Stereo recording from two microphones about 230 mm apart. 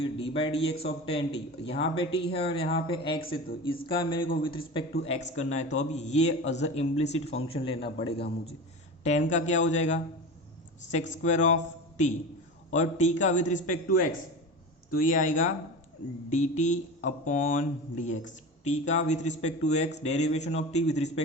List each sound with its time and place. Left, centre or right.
0.0 s speech: left
9.0 s speech: left
14.8 s speech: left